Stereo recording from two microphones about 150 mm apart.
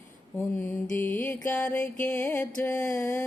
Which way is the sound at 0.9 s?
15° left (ahead or behind).